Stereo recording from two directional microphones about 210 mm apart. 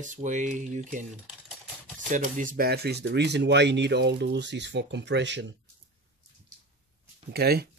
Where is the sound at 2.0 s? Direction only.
40° right (ahead or behind); by 5.5 s 55° right (ahead or behind).